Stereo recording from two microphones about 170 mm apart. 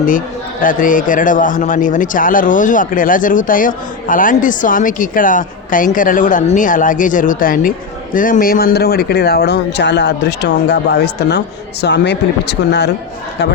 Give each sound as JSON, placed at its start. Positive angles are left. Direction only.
{"t": 0.6, "sound": "speech", "side_deg": 50}